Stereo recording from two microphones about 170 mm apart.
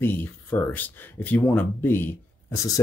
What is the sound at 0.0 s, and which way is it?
Speech, 10° left (ahead or behind).